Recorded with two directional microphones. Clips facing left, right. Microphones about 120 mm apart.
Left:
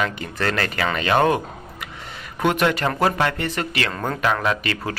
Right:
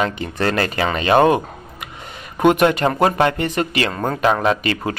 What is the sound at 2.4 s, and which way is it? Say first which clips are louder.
Speech: right 6 dB; 20° right (ahead or behind).